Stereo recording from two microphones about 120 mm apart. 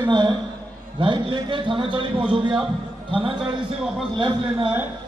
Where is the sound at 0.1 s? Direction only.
40° right (ahead or behind).